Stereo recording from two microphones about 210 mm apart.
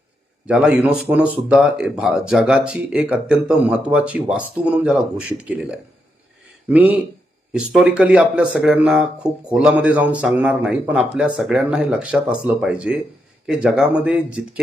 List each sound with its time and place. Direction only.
0.4 s speech: 5° right (ahead or behind)